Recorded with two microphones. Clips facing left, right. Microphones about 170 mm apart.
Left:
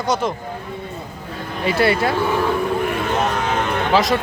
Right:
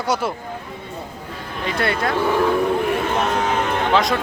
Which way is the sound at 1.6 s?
5° left (ahead or behind).